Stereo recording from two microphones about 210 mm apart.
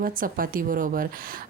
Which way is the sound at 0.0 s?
40° right (ahead or behind).